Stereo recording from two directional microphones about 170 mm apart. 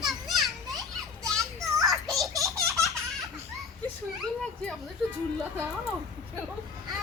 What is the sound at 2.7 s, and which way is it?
Baby laughter, centre (ahead or behind).